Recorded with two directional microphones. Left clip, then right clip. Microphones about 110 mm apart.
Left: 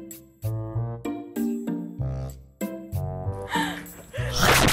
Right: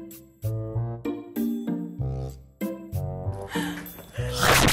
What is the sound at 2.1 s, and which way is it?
Music, 15° left (ahead or behind).